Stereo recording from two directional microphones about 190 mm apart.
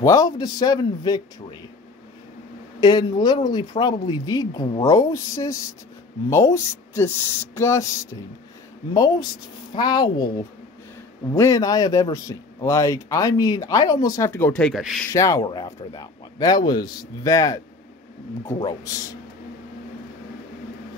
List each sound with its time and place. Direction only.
0.0 s speech: 20° left (ahead or behind)
2.8 s speech: 20° left (ahead or behind); by 15.0 s centre (ahead or behind)
15.0 s speech: 15° left (ahead or behind)
18.7 s speech: 20° left (ahead or behind)